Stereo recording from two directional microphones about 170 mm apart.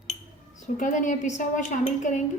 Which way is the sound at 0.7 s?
50° left (ahead or behind).